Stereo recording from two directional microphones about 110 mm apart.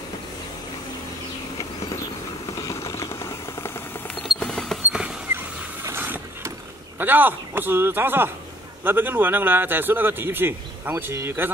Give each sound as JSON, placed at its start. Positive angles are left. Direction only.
{"t": 2.5, "sound": "vehicle", "side_deg": 25}
{"t": 4.1, "sound": "camera", "side_deg": 10}
{"t": 5.9, "sound": "vehicle", "side_deg": -15}
{"t": 7.0, "sound": "a man's voice", "side_deg": -15}